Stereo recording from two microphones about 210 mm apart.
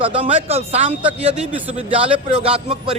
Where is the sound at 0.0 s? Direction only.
25° right (ahead or behind).